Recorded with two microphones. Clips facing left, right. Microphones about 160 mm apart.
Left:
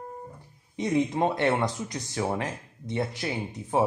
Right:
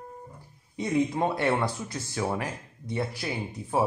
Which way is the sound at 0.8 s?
20° left (ahead or behind).